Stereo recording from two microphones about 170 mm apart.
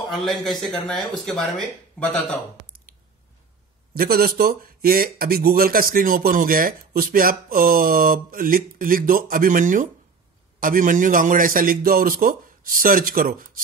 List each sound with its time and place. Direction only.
0.1 s speech: centre (ahead or behind)
3.9 s speech: 60° right (ahead or behind)